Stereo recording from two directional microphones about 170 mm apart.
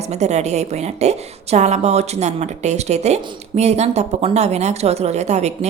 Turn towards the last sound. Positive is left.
turn(degrees=-40)  # may be behind; listen again after turning